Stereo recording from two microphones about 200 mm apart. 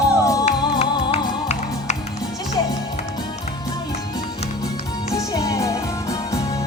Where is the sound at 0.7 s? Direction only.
30° left (ahead or behind).